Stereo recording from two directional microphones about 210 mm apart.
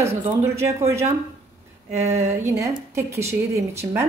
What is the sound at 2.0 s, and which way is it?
A woman's voice, 10° right (ahead or behind).